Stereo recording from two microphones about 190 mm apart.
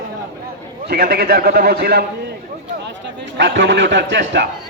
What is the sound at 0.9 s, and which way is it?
Speech, 55° right (ahead or behind).